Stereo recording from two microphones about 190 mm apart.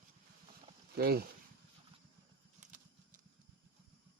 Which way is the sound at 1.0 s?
55° right (ahead or behind).